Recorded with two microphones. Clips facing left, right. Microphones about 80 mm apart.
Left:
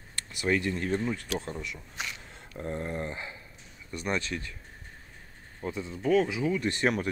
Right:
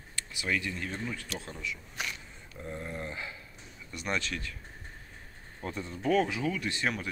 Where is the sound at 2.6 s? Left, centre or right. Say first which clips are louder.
Left 5 dB; left.